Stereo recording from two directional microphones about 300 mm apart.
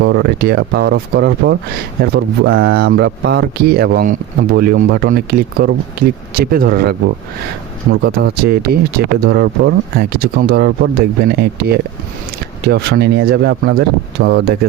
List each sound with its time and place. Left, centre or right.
0.0 s speech: right